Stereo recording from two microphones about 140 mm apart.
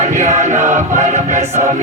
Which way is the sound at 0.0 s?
55° right (ahead or behind).